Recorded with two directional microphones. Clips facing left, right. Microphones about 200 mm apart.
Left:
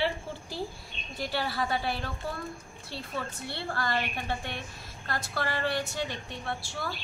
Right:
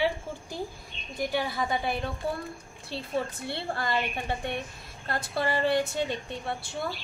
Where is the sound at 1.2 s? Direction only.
15° right (ahead or behind).